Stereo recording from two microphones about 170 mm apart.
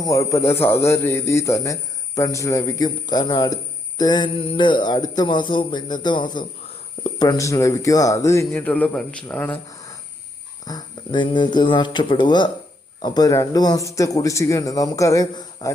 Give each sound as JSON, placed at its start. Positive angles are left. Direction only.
{"t": 0.0, "sound": "a man's voice", "side_deg": 20}
{"t": 10.7, "sound": "a man's voice", "side_deg": 25}